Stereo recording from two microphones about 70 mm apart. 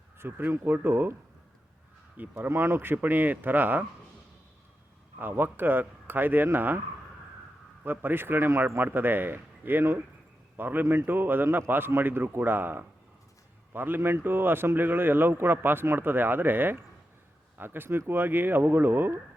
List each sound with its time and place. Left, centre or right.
0.2 s speech: right
2.1 s speech: right
2.5 s speech: right
5.2 s speech: right
7.9 s speech: right